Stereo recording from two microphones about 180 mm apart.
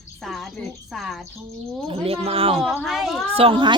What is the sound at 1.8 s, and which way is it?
Speech, 30° right (ahead or behind).